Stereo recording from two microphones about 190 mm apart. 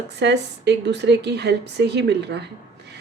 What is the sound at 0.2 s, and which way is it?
Speech, 65° right (ahead or behind).